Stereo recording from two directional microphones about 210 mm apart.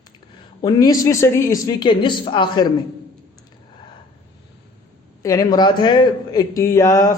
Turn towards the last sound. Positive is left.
turn(degrees=15)  # may be behind; listen again after turning